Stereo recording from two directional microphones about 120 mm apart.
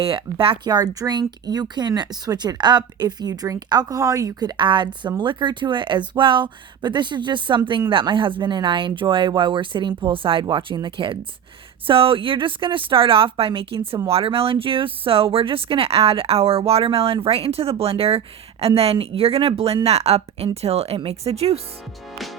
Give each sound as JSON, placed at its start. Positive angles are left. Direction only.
{"t": 0.0, "sound": "speech", "side_deg": -50}